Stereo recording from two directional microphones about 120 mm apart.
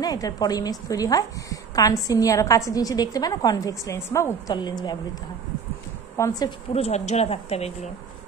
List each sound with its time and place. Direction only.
0.0 s a woman's voice: 30° left (ahead or behind)
4.6 s a woman's voice: 35° left (ahead or behind)
6.1 s a woman's voice: 25° left (ahead or behind)
6.7 s a woman's voice: 60° left (ahead or behind)